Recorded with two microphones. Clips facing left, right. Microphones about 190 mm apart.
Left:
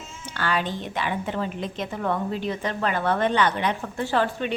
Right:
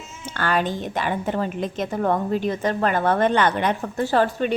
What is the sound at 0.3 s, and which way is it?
A woman's voice, 50° right (ahead or behind).